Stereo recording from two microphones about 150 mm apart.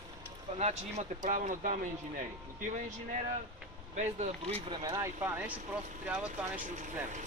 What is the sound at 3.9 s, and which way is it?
Speech, 50° right (ahead or behind).